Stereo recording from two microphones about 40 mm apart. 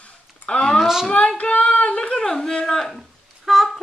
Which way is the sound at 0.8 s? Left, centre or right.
Centre.